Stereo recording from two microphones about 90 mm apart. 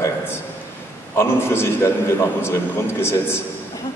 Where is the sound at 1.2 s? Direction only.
25° left (ahead or behind).